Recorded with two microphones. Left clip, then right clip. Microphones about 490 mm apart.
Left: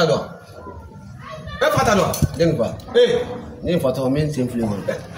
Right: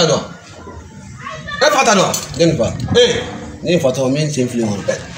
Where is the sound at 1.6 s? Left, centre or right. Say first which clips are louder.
Right 5 dB; left.